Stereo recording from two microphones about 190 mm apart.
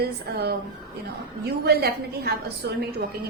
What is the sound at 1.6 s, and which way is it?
Speech, 55° right (ahead or behind).